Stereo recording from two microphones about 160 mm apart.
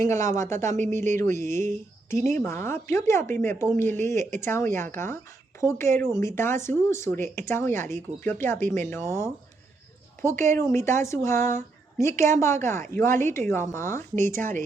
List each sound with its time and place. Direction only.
0.0 s speech: 20° left (ahead or behind)